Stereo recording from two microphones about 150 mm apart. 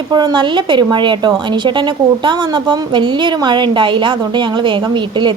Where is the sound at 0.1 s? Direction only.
30° right (ahead or behind).